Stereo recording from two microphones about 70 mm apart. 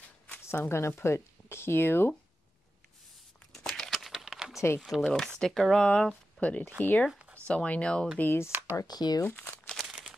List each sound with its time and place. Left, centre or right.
0.7 s speech: left
3.5 s crumpling: centre
5.0 s speech: centre
5.9 s speech: centre
7.1 s a sound: centre
7.4 s speech: centre
8.2 s speech: left
8.5 s speech: right
8.8 s speech: left
9.2 s speech: left
9.8 s a sound: centre